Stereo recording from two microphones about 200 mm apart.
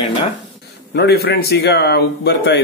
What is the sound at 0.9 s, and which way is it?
A man's voice, 55° left (ahead or behind).